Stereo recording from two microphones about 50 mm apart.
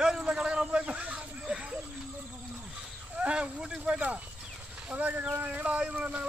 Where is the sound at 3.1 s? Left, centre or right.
Right.